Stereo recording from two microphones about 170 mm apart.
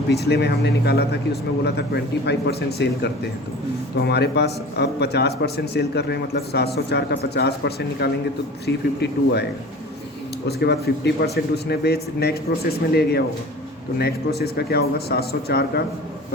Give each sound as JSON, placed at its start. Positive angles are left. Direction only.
{"t": 0.1, "sound": "a man's voice", "side_deg": 75}
{"t": 10.6, "sound": "a man's voice", "side_deg": 75}